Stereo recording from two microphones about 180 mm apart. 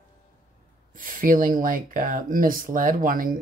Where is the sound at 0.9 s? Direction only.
50° right (ahead or behind).